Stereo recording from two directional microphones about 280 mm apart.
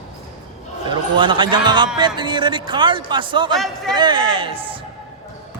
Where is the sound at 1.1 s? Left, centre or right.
Centre.